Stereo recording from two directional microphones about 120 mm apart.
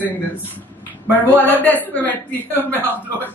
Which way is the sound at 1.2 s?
15° left (ahead or behind).